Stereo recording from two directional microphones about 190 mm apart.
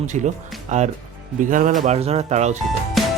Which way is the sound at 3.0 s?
Centre (ahead or behind).